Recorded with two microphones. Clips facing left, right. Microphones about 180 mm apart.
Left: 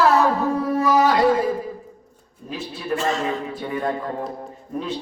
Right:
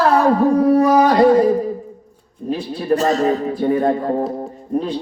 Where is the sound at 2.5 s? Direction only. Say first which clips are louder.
Right 8 dB; 40° right (ahead or behind).